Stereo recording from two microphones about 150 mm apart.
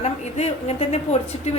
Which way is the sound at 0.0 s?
45° left (ahead or behind).